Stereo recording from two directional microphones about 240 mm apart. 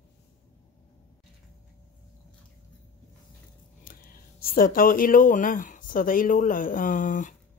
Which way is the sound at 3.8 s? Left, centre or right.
Left.